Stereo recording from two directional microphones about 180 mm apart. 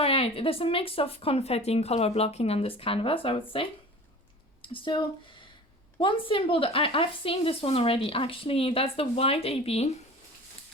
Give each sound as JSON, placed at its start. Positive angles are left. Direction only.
{"t": 0.0, "sound": "a woman's voice", "side_deg": 30}
{"t": 4.7, "sound": "a woman's voice", "side_deg": 25}